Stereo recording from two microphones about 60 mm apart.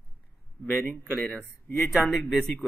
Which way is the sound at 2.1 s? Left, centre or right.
Centre.